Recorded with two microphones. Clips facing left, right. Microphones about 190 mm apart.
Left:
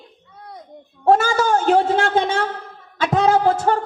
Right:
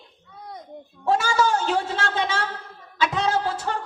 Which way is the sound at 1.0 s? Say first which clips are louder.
Left 5 dB; 55° left (ahead or behind).